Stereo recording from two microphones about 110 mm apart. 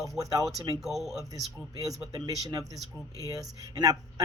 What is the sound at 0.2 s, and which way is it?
Speech, 30° right (ahead or behind).